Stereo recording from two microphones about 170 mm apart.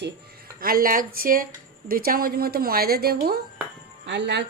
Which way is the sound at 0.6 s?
60° right (ahead or behind).